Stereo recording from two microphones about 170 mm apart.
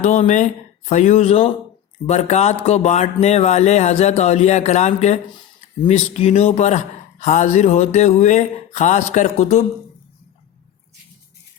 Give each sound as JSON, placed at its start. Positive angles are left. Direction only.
{"t": 0.0, "sound": "speech", "side_deg": 45}